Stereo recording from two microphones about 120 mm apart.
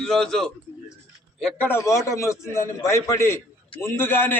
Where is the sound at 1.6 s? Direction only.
20° left (ahead or behind).